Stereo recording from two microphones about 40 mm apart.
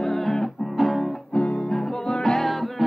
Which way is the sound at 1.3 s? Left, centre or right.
Left.